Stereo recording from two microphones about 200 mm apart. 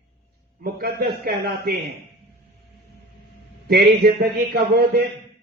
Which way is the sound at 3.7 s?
50° right (ahead or behind).